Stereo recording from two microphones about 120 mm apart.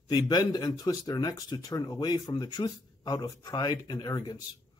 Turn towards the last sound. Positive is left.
turn(degrees=35)  # may be behind; listen again after turning